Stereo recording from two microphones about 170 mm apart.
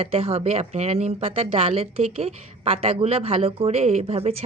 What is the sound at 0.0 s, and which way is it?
Speech, 35° right (ahead or behind).